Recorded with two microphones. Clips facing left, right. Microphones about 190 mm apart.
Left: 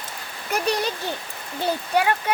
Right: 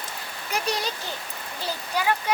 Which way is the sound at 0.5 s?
60° left (ahead or behind).